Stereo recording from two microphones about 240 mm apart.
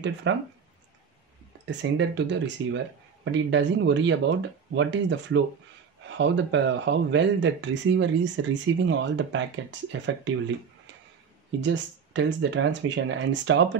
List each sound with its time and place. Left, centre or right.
0.0 s speech: right
1.7 s speech: right
11.6 s speech: right